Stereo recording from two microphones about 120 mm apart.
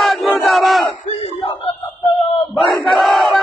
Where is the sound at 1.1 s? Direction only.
60° left (ahead or behind).